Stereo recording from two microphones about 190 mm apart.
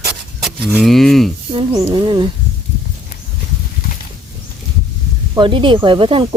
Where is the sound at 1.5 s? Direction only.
25° right (ahead or behind).